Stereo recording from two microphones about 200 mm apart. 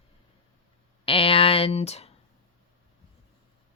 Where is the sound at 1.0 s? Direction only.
25° left (ahead or behind).